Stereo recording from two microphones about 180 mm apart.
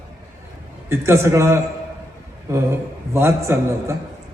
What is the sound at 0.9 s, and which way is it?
A man's voice, 15° right (ahead or behind).